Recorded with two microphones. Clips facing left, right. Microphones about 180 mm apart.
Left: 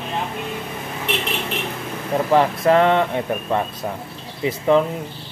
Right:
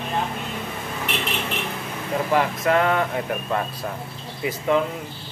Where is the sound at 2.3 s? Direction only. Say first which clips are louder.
Left 5 dB; 30° left (ahead or behind).